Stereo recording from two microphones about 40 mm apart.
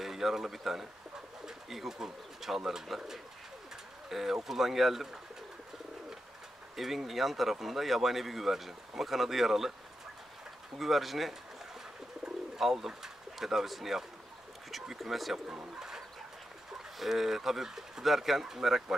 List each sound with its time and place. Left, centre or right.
0.0 s speech: centre
6.8 s speech: centre
10.8 s speech: centre
12.5 s speech: centre
15.3 s speech: right
17.0 s speech: centre